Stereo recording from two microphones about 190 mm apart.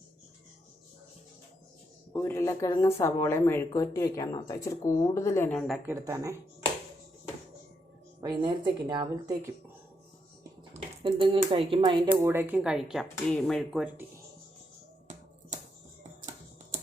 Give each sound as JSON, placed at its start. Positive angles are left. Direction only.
{"t": 2.1, "sound": "speech", "side_deg": 15}
{"t": 5.9, "sound": "speech", "side_deg": -15}
{"t": 8.2, "sound": "a woman's voice", "side_deg": -25}
{"t": 10.8, "sound": "speech", "side_deg": -30}